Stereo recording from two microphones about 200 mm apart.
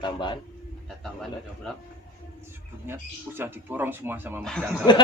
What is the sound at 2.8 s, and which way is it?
Speech, 10° right (ahead or behind).